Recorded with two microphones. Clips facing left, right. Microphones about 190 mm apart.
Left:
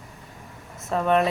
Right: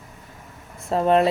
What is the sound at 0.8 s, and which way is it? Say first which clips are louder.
Speech: right 3 dB; 30° right (ahead or behind).